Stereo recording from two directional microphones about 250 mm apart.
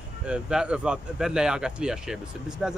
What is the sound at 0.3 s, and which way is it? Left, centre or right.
Speech, centre.